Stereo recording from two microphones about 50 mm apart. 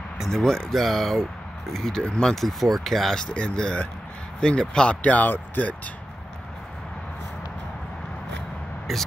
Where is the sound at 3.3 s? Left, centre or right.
Centre; by 5.7 s left.